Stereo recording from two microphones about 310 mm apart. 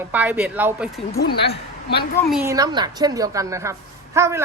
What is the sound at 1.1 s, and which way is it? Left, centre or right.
Speech, left.